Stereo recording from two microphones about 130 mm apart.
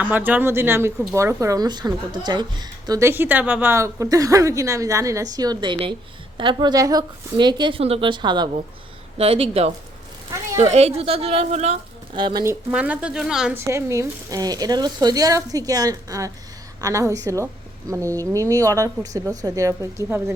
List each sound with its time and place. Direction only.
0.0 s a woman's voice: 15° right (ahead or behind); by 3.0 s 30° right (ahead or behind)
3.0 s a woman's voice: 15° right (ahead or behind); by 7.8 s 35° right (ahead or behind)
7.8 s a woman's voice: 50° right (ahead or behind)
9.1 s a woman's voice: 50° right (ahead or behind)
12.1 s a woman's voice: 35° right (ahead or behind)
12.7 s a woman's voice: 10° right (ahead or behind)
13.5 s a woman's voice: 20° right (ahead or behind)